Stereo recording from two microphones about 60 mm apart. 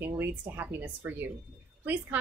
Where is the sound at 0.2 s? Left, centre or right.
Right.